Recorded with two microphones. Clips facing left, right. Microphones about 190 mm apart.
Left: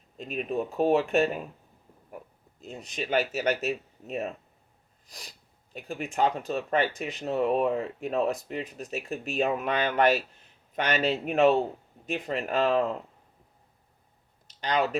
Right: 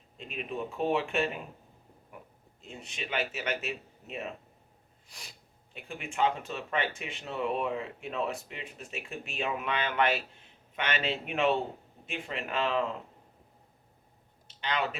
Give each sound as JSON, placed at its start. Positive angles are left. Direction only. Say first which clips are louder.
{"t": 0.2, "sound": "speech", "louder": "left 6 dB", "side_deg": 40}
{"t": 2.6, "sound": "speech", "louder": "left 6 dB", "side_deg": 40}
{"t": 5.7, "sound": "speech", "louder": "left 5 dB", "side_deg": 40}
{"t": 14.4, "sound": "a sound", "louder": "left 6 dB", "side_deg": 40}